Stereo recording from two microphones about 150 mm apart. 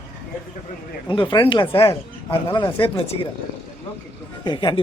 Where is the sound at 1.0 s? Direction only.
35° left (ahead or behind).